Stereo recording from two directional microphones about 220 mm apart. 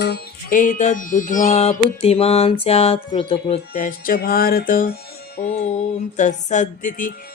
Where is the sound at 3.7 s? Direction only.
40° left (ahead or behind).